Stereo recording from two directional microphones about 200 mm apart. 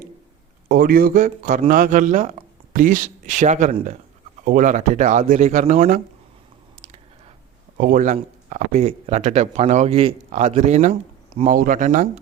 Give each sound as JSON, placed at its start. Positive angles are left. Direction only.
{"t": 0.7, "sound": "speech", "side_deg": -45}
{"t": 7.8, "sound": "speech", "side_deg": -45}